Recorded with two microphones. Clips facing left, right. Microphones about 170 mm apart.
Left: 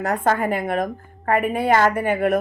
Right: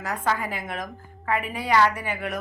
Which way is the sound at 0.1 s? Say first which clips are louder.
Left 6 dB; 50° left (ahead or behind).